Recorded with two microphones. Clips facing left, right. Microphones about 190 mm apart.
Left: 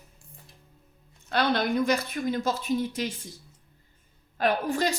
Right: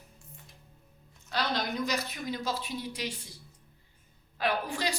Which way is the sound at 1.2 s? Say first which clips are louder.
Left 7 dB; 55° left (ahead or behind).